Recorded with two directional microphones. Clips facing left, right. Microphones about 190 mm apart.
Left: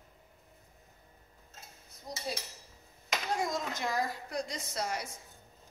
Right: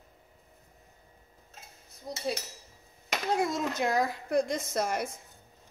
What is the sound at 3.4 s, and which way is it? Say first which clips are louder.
A woman's voice: right 5 dB; 65° right (ahead or behind).